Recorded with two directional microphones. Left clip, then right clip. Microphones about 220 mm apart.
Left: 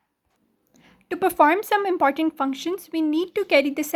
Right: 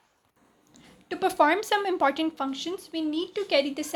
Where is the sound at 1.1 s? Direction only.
35° left (ahead or behind).